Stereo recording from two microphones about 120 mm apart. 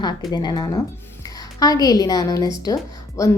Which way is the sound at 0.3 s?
35° left (ahead or behind).